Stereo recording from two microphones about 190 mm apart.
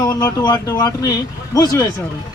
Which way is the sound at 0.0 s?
15° left (ahead or behind).